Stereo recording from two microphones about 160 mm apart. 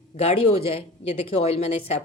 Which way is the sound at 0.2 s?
40° left (ahead or behind).